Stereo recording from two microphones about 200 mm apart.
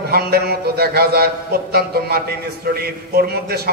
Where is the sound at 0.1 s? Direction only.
50° right (ahead or behind).